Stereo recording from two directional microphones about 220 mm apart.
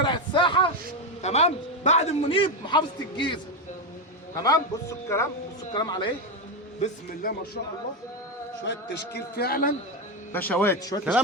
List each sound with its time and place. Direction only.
0.0 s a sound: 20° left (ahead or behind)
1.2 s a man's voice: 30° left (ahead or behind)
4.4 s a man's voice: 15° left (ahead or behind)
6.8 s speech: 40° left (ahead or behind)
8.6 s a man's voice: 50° left (ahead or behind)
10.3 s speech: 10° left (ahead or behind)